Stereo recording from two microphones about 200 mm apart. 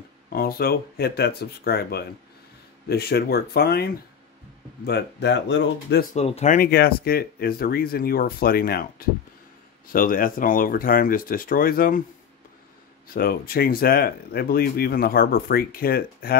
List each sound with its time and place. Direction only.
0.3 s speech: 50° left (ahead or behind)
6.1 s speech: 30° left (ahead or behind)
13.1 s speech: 45° left (ahead or behind)